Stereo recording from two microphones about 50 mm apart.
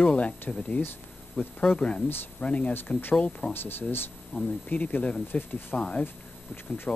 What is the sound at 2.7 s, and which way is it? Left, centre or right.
Speech, left.